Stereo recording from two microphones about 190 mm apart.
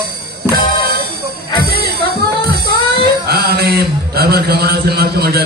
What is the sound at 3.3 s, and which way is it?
Mantra, 55° right (ahead or behind).